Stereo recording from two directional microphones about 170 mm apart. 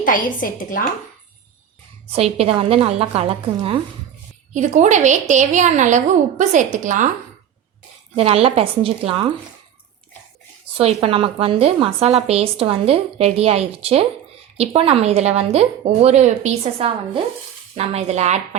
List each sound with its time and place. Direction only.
0.0 s a woman's voice: 50° left (ahead or behind)
2.1 s a woman's voice: 35° right (ahead or behind)
8.1 s a woman's voice: 35° right (ahead or behind)
10.8 s a woman's voice: 35° right (ahead or behind)